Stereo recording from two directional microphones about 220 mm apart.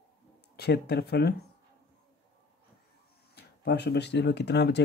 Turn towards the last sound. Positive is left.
turn(degrees=50)  # may be behind; listen again after turning